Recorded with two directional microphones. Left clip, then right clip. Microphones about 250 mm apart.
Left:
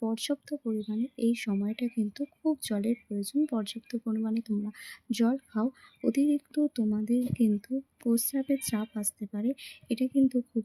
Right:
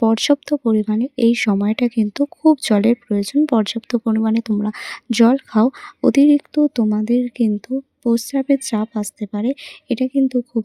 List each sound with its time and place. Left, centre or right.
0.0 s speech: right